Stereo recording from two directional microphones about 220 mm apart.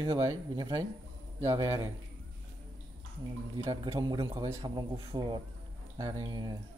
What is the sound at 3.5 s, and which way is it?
A man's voice, 20° right (ahead or behind).